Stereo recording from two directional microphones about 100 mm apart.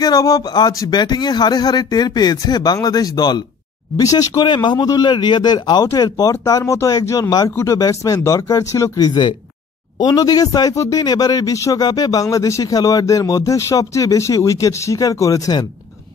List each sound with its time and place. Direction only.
0.0 s a man's voice: 40° left (ahead or behind)
4.5 s a man's voice: 45° left (ahead or behind)